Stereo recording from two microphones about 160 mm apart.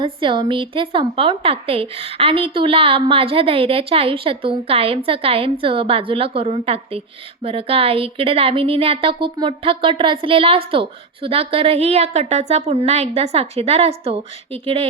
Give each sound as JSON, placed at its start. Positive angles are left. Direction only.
{"t": 0.0, "sound": "a woman's voice", "side_deg": -30}